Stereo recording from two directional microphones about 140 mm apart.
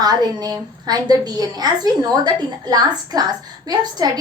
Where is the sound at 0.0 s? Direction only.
30° right (ahead or behind).